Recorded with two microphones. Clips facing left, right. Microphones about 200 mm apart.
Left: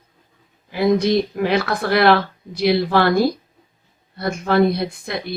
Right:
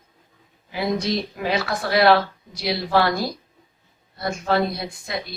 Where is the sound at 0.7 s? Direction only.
55° left (ahead or behind).